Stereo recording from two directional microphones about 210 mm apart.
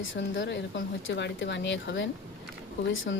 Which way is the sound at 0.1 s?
60° left (ahead or behind).